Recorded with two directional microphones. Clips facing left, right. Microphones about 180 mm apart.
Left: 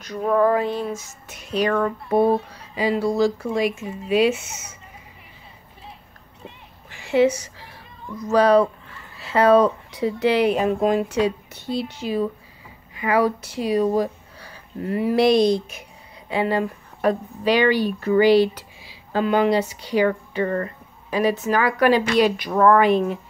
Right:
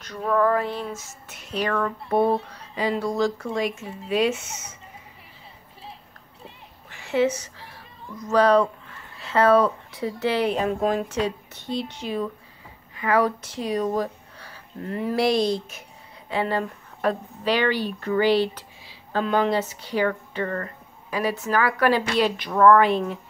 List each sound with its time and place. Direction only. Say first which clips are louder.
0.0 s speech: left 3 dB; 15° left (ahead or behind)
2.0 s speech: left 2 dB; centre (ahead or behind)
6.9 s a sound: left 4 dB; 10° left (ahead or behind)
8.2 s speech: left 2 dB; 10° left (ahead or behind)